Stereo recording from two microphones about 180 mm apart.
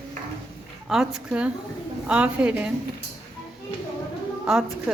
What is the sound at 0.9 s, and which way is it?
A woman's voice, 5° right (ahead or behind).